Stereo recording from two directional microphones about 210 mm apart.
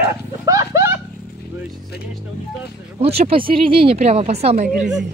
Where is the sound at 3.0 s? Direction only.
30° right (ahead or behind).